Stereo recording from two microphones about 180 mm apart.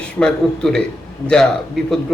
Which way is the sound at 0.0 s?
5° left (ahead or behind).